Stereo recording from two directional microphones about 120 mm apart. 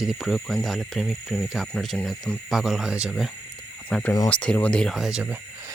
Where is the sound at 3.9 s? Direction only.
5° left (ahead or behind).